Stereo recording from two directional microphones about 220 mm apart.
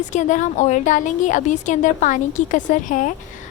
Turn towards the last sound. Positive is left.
turn(degrees=35)  # may be behind; listen again after turning